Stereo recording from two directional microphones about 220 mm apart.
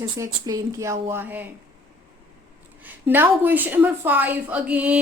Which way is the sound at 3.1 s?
10° right (ahead or behind).